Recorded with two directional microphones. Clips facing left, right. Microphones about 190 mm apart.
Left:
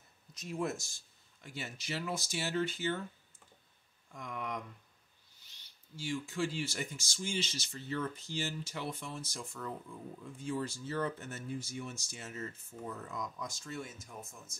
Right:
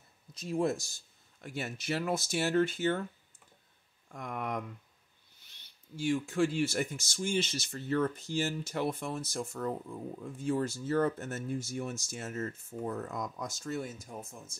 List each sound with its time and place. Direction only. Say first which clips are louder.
0.3 s speech: right 6 dB; 30° right (ahead or behind)
1.4 s speech: right 6 dB; 55° right (ahead or behind)
4.1 s speech: right 4 dB; 55° right (ahead or behind)
5.9 s speech: right 7 dB; 55° right (ahead or behind); by 14.5 s 35° right (ahead or behind)